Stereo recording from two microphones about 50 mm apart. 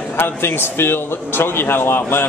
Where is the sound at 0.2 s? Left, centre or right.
Left.